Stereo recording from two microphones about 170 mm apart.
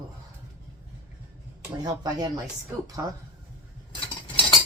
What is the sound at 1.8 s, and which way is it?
Speech, 20° right (ahead or behind).